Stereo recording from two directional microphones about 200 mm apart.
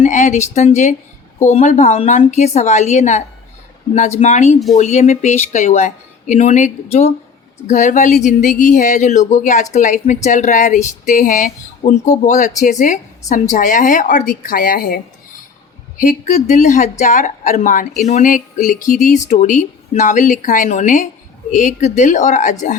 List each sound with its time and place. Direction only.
0.0 s speech: 35° left (ahead or behind)
7.7 s a woman's voice: 40° left (ahead or behind)
16.0 s speech: 35° left (ahead or behind)